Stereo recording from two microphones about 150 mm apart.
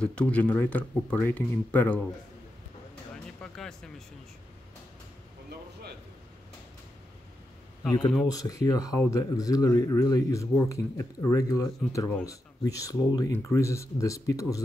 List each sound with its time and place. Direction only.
0.0 s speech: 10° left (ahead or behind)
3.3 s music: 5° left (ahead or behind)
8.3 s speech: 25° left (ahead or behind)